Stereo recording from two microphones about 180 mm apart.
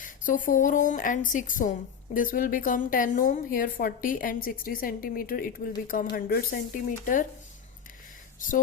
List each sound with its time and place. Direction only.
0.0 s a woman's voice: 50° left (ahead or behind)
8.4 s a woman's voice: 50° left (ahead or behind)